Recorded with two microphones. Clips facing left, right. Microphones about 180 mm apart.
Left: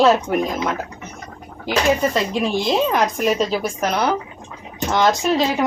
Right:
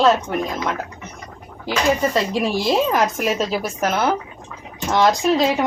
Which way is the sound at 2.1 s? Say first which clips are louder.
Even; 5° right (ahead or behind).